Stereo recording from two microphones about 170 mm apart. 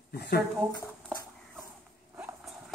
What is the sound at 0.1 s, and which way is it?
Speech, 70° left (ahead or behind).